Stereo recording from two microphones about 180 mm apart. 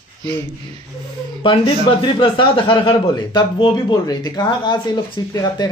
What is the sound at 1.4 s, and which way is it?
A man's voice, 30° left (ahead or behind).